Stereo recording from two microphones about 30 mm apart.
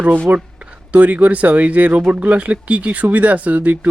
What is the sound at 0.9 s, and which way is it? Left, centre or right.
Speech, right.